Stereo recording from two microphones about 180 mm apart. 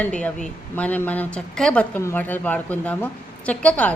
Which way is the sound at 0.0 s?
5° left (ahead or behind).